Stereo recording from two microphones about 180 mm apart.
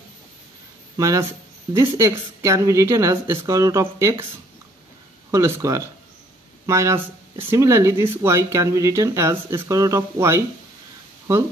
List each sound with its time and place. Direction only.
0.9 s speech: 15° right (ahead or behind)
5.3 s speech: 15° right (ahead or behind)